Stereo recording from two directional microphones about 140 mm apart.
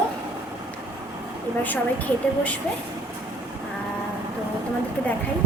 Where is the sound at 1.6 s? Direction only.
10° left (ahead or behind).